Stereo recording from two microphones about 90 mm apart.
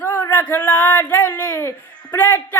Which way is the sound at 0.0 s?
15° left (ahead or behind).